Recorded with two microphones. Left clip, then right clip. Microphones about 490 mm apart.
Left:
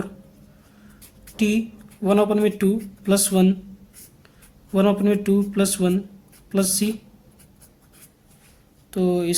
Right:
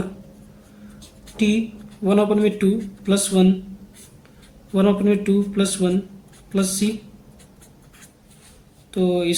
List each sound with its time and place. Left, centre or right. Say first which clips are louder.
1.4 s speech: right 1 dB; left
4.7 s speech: right 1 dB; left
8.9 s speech: right 2 dB; left